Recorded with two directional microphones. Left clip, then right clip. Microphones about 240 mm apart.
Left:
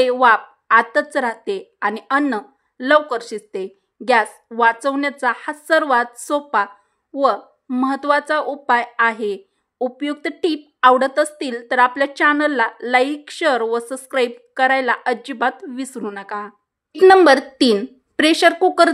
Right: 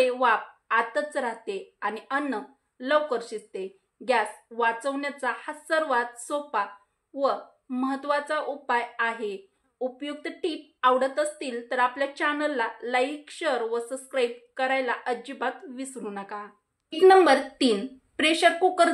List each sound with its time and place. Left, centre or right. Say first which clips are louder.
0.0 s speech: left 9 dB; left